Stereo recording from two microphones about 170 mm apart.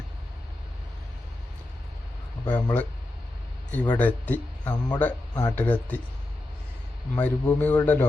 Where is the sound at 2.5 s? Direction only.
25° left (ahead or behind).